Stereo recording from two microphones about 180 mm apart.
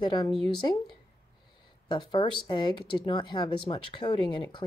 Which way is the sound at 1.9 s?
25° left (ahead or behind).